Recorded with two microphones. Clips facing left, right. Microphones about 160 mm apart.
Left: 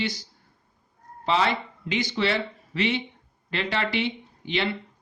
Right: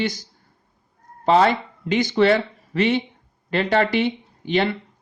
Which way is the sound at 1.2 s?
45° right (ahead or behind).